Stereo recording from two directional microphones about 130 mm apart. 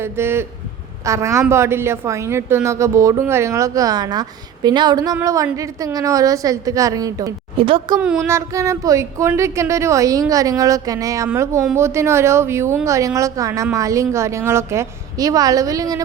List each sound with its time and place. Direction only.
0.0 s a woman's voice: 20° right (ahead or behind)
7.6 s speech: 45° right (ahead or behind)
8.0 s child singing: 5° right (ahead or behind)
8.3 s a woman's voice: 25° right (ahead or behind)